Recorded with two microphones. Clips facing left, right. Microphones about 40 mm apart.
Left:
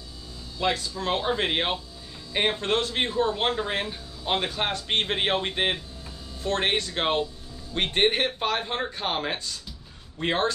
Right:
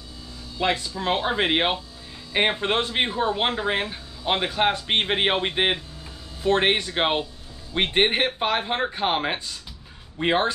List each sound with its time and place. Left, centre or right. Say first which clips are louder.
0.6 s speech: right 2 dB; right